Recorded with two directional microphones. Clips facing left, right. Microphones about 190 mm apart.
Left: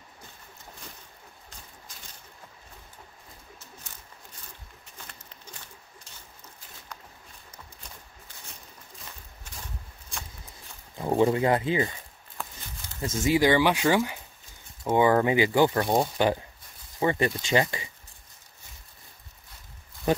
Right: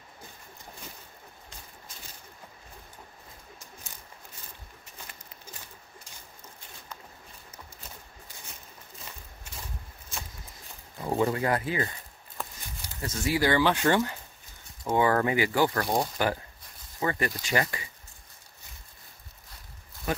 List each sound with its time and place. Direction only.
11.0 s speech: 25° left (ahead or behind)
13.0 s speech: 25° left (ahead or behind)